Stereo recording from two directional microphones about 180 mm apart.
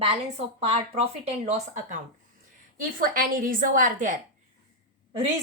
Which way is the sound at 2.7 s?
50° right (ahead or behind).